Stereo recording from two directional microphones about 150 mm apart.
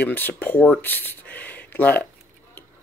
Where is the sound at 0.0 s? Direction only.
10° left (ahead or behind).